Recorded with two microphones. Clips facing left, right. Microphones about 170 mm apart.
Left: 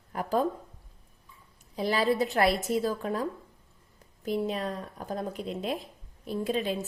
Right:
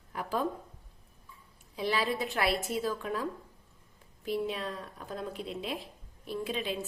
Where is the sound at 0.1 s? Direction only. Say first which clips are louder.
Left 5 dB; 45° left (ahead or behind).